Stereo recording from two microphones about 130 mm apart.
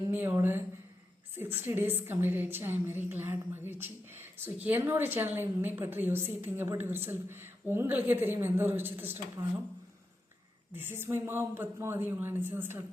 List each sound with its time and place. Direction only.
0.1 s a woman's voice: 15° right (ahead or behind)
10.7 s a woman's voice: 15° right (ahead or behind)